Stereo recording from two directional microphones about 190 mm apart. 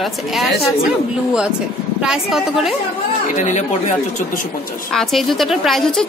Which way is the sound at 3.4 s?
40° left (ahead or behind).